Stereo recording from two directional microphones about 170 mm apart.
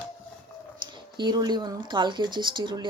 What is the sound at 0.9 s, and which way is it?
Speech, 25° right (ahead or behind).